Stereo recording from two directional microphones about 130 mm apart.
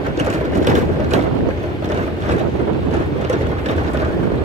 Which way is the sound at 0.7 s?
70° right (ahead or behind).